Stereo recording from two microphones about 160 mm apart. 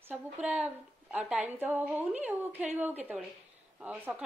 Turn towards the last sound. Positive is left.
turn(degrees=-10)  # may be behind; listen again after turning